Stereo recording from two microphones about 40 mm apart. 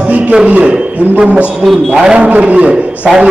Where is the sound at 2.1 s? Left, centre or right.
Right.